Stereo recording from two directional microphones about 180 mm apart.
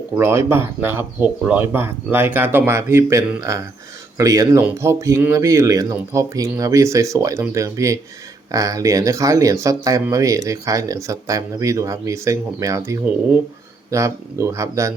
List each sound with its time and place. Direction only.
0.2 s speech: 15° right (ahead or behind)